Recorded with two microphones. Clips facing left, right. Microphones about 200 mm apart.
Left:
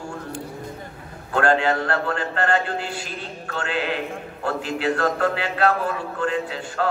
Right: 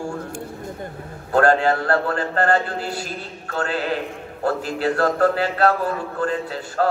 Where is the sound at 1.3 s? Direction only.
40° right (ahead or behind).